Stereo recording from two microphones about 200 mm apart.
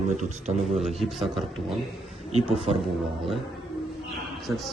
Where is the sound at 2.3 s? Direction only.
30° right (ahead or behind).